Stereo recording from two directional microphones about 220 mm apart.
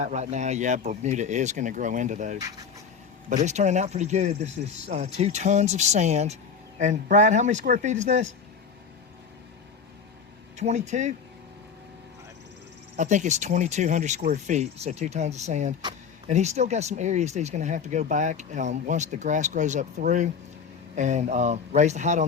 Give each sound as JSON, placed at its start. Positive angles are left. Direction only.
{"t": 0.0, "sound": "speech", "side_deg": -30}
{"t": 10.6, "sound": "speech", "side_deg": -30}
{"t": 13.0, "sound": "speech", "side_deg": -35}